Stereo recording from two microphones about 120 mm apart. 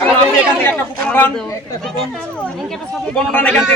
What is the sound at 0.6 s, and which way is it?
Speech, 15° left (ahead or behind).